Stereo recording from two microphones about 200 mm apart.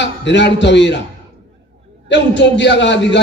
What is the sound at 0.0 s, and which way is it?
Speech, 60° left (ahead or behind).